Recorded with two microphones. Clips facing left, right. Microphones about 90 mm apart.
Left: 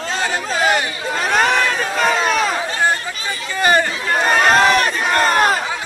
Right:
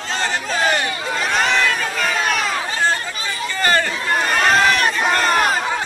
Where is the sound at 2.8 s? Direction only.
15° left (ahead or behind).